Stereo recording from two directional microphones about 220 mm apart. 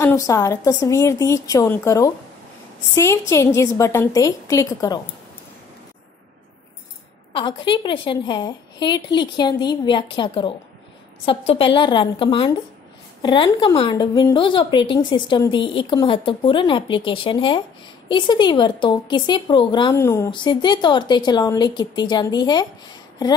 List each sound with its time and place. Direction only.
0.0 s a woman's voice: 15° left (ahead or behind)
7.3 s speech: 20° left (ahead or behind)